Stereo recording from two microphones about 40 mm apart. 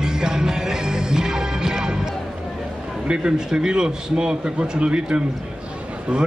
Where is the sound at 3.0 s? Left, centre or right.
Right.